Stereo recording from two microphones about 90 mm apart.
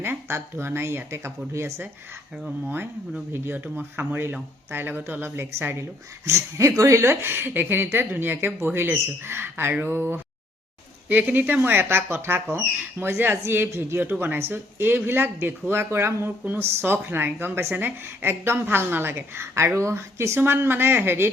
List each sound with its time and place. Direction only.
0.0 s speech: 25° right (ahead or behind)
3.3 s speech: 25° right (ahead or behind)